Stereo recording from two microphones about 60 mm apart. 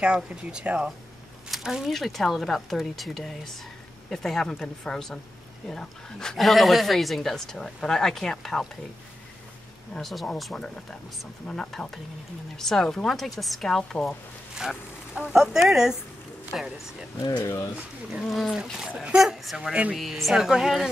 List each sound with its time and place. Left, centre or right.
0.0 s speech: centre
9.9 s speech: centre
10.5 s speech: centre
14.6 s speech: centre
17.2 s speech: left
18.2 s speech: centre